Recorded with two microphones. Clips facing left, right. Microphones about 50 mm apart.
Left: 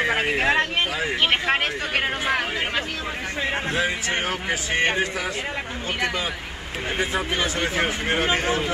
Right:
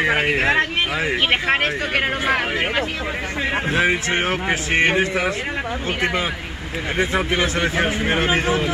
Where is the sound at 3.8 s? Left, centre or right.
Right.